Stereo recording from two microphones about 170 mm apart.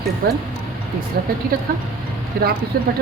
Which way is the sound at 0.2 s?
60° right (ahead or behind).